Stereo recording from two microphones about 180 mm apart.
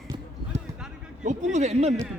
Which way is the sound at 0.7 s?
20° right (ahead or behind).